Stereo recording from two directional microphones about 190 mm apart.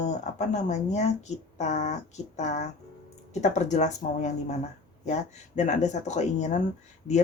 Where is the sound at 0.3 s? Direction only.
40° left (ahead or behind).